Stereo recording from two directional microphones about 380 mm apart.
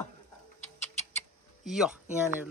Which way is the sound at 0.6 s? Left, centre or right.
Centre.